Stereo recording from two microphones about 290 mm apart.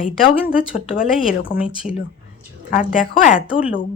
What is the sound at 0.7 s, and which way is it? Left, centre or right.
Speech, left.